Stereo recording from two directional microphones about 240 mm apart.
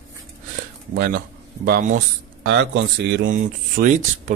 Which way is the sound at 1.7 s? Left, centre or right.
Right.